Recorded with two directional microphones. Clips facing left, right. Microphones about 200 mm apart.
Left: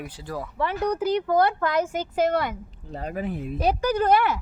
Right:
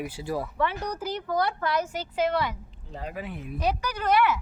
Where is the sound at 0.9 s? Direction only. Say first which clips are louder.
Left 7 dB; 60° left (ahead or behind).